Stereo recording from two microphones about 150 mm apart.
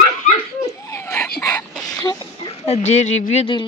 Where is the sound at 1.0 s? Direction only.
10° left (ahead or behind).